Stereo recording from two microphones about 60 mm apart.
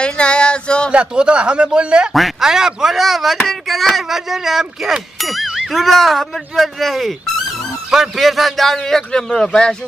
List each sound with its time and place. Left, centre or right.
0.0 s a sound: centre
0.9 s a man's voice: centre
2.1 s clang: centre